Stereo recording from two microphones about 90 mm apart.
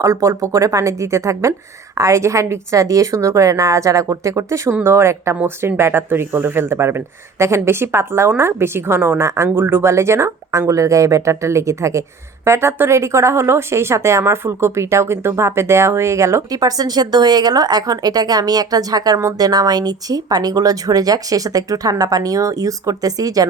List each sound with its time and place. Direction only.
0.0 s a woman's voice: 40° right (ahead or behind)